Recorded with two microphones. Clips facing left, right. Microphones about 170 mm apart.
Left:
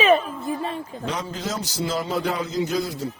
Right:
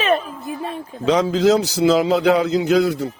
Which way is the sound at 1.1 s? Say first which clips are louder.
Right 15 dB; 90° right.